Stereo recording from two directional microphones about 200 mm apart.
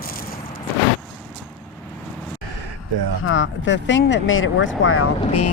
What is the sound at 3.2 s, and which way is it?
Speech, 70° left (ahead or behind).